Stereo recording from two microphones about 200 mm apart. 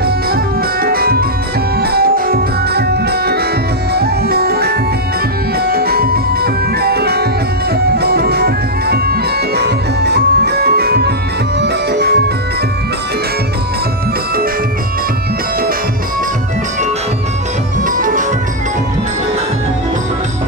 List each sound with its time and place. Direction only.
0.0 s music: 50° right (ahead or behind)
7.7 s bagpipes: 55° right (ahead or behind)
17.8 s music: 40° right (ahead or behind)